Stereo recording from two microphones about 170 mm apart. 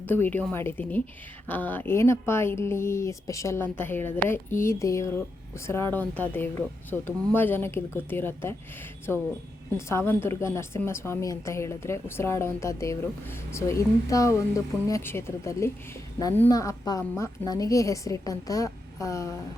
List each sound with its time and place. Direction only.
0.1 s a woman's voice: 10° left (ahead or behind)